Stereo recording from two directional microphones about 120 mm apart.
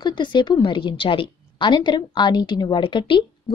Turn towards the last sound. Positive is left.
turn(degrees=45)  # may be behind; listen again after turning